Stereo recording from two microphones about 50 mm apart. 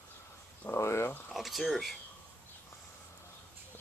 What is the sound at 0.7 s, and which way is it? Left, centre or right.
Speech, left.